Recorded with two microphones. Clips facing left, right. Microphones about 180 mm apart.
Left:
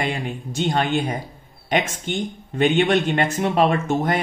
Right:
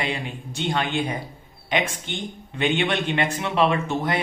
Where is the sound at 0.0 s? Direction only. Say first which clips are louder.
Left 3 dB; 45° left (ahead or behind).